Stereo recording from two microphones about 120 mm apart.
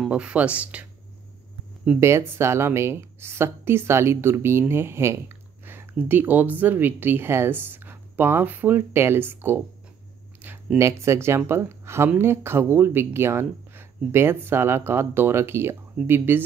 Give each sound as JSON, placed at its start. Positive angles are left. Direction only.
{"t": 0.1, "sound": "speech", "side_deg": -10}
{"t": 2.0, "sound": "speech", "side_deg": -20}